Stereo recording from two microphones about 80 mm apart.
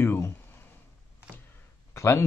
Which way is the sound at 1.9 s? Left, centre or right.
Left.